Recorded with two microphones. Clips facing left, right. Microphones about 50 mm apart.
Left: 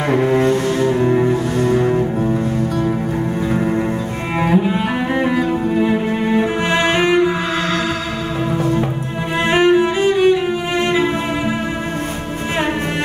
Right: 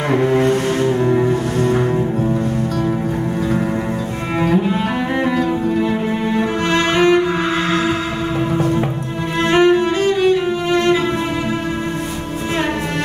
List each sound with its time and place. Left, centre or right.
0.2 s cello: centre
0.5 s cello: right
0.8 s cello: centre
4.4 s cello: centre
9.5 s cello: centre